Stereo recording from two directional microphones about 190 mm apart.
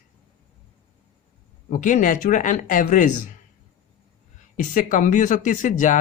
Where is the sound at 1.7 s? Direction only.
45° left (ahead or behind).